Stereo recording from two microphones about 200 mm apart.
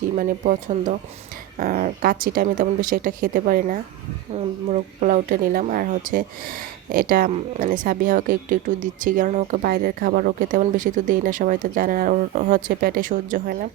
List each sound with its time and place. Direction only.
0.2 s speech: 40° right (ahead or behind)